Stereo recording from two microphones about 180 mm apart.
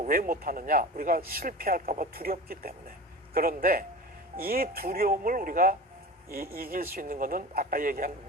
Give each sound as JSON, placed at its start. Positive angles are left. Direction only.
{"t": 0.0, "sound": "a man's voice", "side_deg": -50}